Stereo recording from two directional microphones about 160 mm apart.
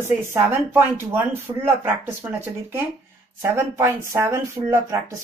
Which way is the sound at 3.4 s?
15° right (ahead or behind).